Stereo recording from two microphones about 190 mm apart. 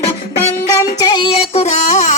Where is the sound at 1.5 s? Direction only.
35° left (ahead or behind).